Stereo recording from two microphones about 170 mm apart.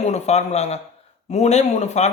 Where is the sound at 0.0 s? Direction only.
40° left (ahead or behind).